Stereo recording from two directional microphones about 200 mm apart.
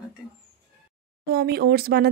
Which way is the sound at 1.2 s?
50° right (ahead or behind).